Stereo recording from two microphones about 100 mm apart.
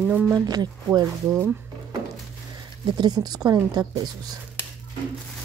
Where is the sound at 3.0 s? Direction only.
40° right (ahead or behind).